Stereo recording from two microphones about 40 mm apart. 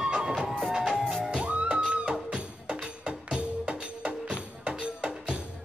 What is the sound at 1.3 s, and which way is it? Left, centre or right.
Music, right.